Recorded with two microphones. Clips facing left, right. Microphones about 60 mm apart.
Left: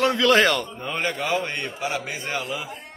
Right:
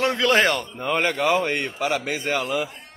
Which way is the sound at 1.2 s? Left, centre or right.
Right.